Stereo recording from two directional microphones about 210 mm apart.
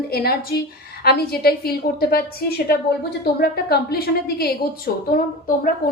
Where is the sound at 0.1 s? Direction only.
45° left (ahead or behind).